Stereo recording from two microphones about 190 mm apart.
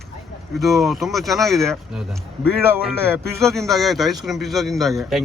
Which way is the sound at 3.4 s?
Centre (ahead or behind).